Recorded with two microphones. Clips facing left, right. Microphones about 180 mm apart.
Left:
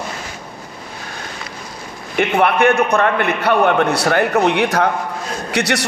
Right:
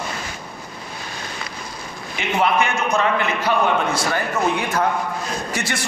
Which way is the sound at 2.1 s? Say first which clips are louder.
Left 5 dB; 60° left (ahead or behind).